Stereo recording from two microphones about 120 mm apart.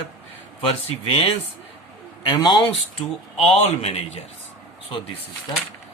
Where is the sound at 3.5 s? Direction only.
60° left (ahead or behind).